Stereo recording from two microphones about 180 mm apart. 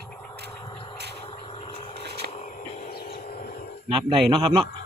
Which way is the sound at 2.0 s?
65° right (ahead or behind).